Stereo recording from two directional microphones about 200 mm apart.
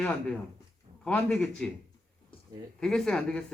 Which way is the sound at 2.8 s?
5° left (ahead or behind).